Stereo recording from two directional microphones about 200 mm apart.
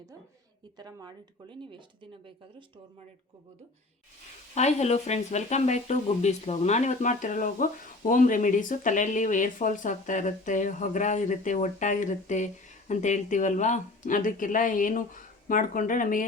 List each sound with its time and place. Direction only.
0.8 s speech: 20° right (ahead or behind)
4.5 s speech: 35° left (ahead or behind)